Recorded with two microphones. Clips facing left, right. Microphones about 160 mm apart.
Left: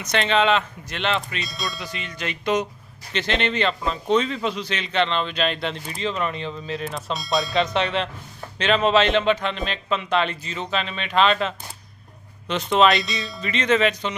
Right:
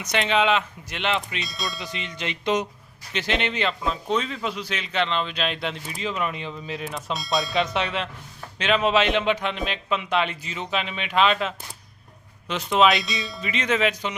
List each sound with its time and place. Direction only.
0.0 s a man's voice: 10° right (ahead or behind)
1.5 s a man's voice: centre (ahead or behind)
1.8 s speech: 20° right (ahead or behind)
3.1 s a man's voice: 10° right (ahead or behind)
6.8 s a man's voice: centre (ahead or behind)